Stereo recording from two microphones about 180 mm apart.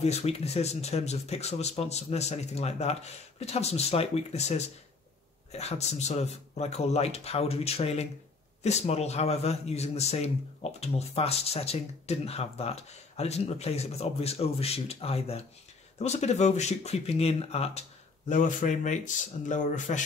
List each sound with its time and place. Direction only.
0.0 s a man's voice: 35° left (ahead or behind)